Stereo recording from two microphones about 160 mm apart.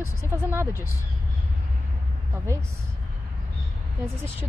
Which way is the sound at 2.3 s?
15° right (ahead or behind).